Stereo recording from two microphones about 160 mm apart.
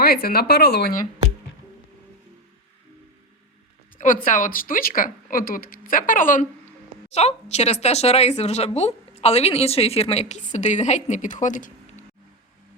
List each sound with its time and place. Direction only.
0.0 s speech: 75° left (ahead or behind)
3.9 s speech: 60° left (ahead or behind)
7.1 s speech: 40° left (ahead or behind)